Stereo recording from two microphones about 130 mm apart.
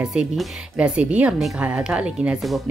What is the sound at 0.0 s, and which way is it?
Speech, 5° right (ahead or behind).